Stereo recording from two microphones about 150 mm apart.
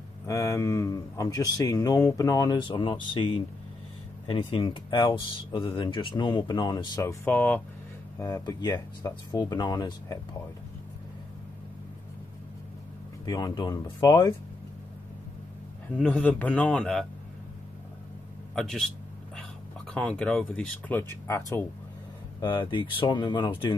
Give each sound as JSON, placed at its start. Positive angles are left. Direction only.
{"t": 0.3, "sound": "speech", "side_deg": 20}
{"t": 8.2, "sound": "speech", "side_deg": 25}
{"t": 13.2, "sound": "speech", "side_deg": 30}
{"t": 16.0, "sound": "speech", "side_deg": 10}
{"t": 18.5, "sound": "speech", "side_deg": 0}
{"t": 19.9, "sound": "speech", "side_deg": 5}
{"t": 21.1, "sound": "speech", "side_deg": 15}
{"t": 22.4, "sound": "speech", "side_deg": 30}